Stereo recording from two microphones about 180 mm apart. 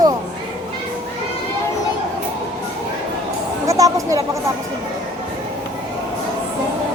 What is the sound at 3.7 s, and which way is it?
Speech, 20° right (ahead or behind).